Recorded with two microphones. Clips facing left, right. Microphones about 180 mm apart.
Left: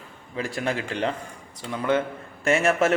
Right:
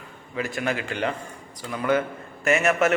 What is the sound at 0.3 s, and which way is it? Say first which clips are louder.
A man's voice: even; 30° left (ahead or behind).